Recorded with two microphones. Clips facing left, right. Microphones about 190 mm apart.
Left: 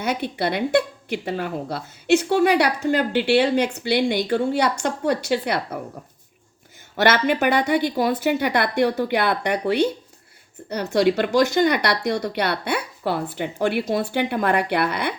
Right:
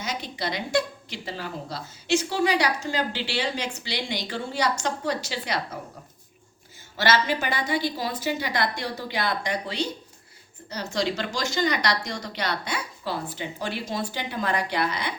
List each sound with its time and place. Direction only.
0.0 s a woman's voice: 60° left (ahead or behind)
6.9 s a woman's voice: 60° left (ahead or behind)